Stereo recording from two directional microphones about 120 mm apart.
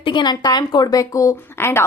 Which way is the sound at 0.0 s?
40° left (ahead or behind).